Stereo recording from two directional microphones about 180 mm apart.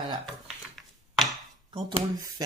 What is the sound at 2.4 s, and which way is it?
Speech, 20° right (ahead or behind).